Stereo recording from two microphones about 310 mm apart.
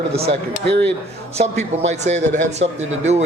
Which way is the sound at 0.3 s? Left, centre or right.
Right.